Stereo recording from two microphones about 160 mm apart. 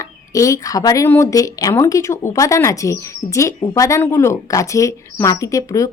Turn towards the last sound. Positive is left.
turn(degrees=20)  # may be behind; listen again after turning